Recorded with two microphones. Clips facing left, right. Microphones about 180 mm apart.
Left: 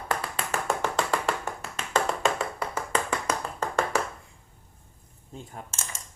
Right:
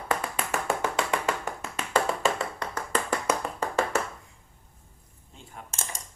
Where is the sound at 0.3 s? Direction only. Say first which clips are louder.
Even; 10° right (ahead or behind).